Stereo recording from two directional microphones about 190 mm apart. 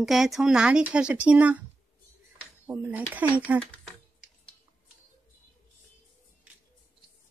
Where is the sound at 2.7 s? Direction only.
10° right (ahead or behind).